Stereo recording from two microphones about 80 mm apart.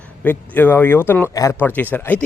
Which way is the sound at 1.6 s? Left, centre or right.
Left.